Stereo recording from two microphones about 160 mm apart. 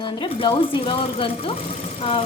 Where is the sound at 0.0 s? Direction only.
30° left (ahead or behind).